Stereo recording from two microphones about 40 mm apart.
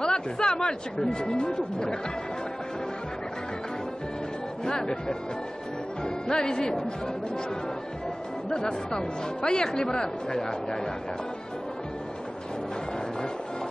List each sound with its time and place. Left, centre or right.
0.0 s speech: centre
4.6 s speech: centre
8.5 s speech: centre